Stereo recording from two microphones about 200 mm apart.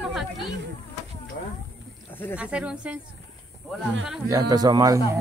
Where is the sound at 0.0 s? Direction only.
Centre (ahead or behind).